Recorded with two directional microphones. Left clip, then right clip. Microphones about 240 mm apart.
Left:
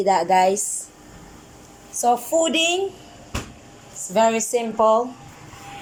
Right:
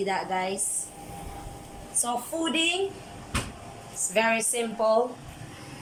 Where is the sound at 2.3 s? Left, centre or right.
Centre.